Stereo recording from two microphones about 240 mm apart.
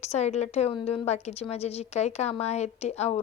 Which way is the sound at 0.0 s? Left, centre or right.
Left.